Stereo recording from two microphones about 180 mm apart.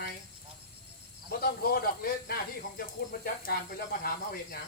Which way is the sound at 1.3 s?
60° left (ahead or behind).